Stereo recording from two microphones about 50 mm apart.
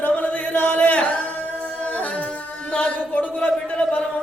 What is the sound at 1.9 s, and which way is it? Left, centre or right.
Music, left.